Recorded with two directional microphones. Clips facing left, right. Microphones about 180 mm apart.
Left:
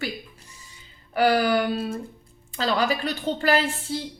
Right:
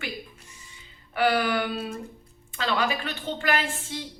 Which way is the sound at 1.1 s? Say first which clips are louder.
Left 4 dB; 40° left (ahead or behind).